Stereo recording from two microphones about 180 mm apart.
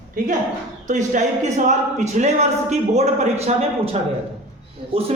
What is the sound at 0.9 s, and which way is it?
A man's voice, 40° right (ahead or behind).